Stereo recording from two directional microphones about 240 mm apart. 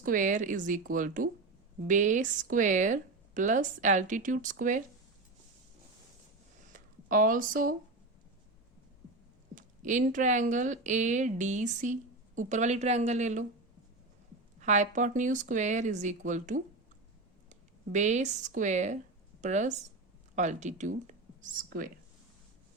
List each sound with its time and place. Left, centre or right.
0.0 s speech: right
6.7 s speech: right
9.6 s speech: right
14.6 s speech: right